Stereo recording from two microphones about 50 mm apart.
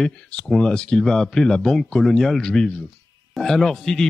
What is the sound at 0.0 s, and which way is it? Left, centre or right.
Speech, centre.